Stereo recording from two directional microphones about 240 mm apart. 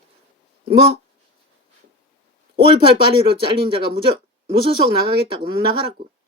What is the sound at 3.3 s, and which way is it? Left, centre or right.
Speech, right.